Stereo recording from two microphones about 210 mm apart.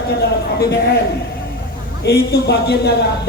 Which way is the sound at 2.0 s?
50° left (ahead or behind).